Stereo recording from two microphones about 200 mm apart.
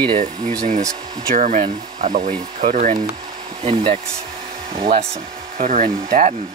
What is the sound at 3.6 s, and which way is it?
Speech, 30° right (ahead or behind).